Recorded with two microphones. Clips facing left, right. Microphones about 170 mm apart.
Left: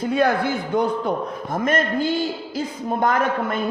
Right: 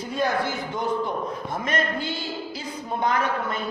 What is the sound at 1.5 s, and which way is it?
A man's voice, 50° left (ahead or behind).